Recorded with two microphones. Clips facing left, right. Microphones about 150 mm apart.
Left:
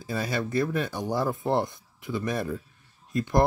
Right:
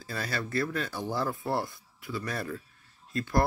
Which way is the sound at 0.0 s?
15° left (ahead or behind).